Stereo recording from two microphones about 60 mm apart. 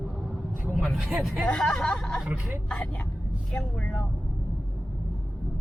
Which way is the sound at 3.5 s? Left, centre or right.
Left.